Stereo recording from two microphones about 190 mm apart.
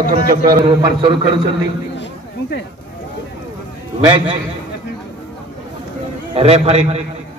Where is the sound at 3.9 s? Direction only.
25° right (ahead or behind).